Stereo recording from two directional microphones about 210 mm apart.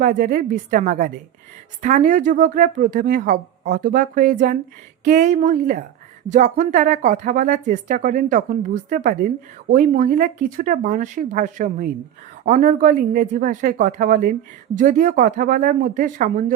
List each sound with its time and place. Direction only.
0.0 s speech: 40° right (ahead or behind)